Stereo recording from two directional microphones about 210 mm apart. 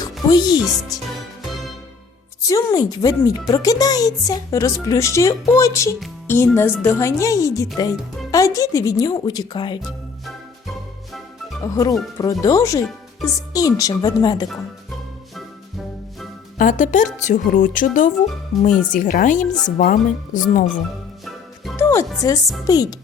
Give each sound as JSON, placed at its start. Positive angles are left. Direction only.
{"t": 0.0, "sound": "speech", "side_deg": 20}
{"t": 1.4, "sound": "music", "side_deg": 0}
{"t": 2.5, "sound": "speech", "side_deg": 15}
{"t": 11.6, "sound": "speech", "side_deg": 15}
{"t": 16.6, "sound": "speech", "side_deg": 35}
{"t": 21.2, "sound": "music", "side_deg": 0}
{"t": 21.8, "sound": "speech", "side_deg": 10}